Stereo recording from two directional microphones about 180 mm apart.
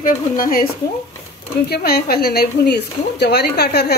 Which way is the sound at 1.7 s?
60° left (ahead or behind).